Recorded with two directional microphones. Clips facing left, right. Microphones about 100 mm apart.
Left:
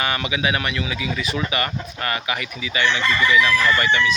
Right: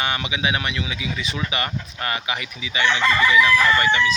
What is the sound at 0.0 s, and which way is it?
Speech, 20° right (ahead or behind).